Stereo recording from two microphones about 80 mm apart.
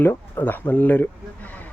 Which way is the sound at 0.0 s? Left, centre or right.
Left.